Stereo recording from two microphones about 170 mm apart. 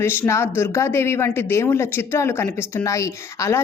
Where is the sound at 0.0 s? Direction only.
15° left (ahead or behind).